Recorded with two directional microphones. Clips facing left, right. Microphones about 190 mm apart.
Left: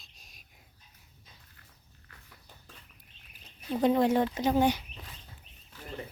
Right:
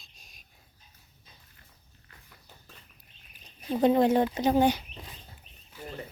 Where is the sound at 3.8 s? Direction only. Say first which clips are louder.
Right 3 dB; 25° right (ahead or behind).